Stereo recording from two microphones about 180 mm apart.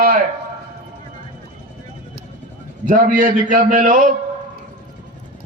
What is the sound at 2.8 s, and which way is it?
A man's voice, 50° right (ahead or behind).